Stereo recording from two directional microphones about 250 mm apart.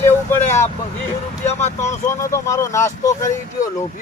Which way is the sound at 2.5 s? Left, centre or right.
Centre.